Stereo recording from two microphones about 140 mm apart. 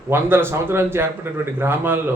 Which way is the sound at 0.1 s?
15° right (ahead or behind).